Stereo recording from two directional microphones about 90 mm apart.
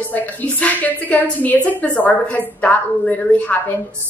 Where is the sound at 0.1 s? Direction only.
15° left (ahead or behind).